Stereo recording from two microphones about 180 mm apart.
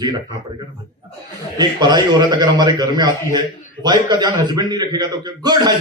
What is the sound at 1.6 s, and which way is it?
A man's voice, 25° right (ahead or behind).